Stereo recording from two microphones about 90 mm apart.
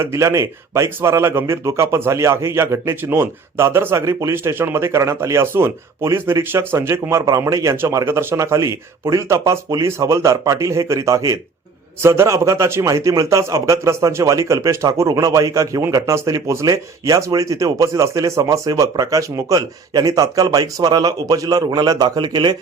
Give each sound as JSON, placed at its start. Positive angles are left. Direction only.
{"t": 0.0, "sound": "a man's voice", "side_deg": -35}